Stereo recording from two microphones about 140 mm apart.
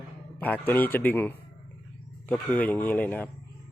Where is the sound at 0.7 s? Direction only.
15° left (ahead or behind).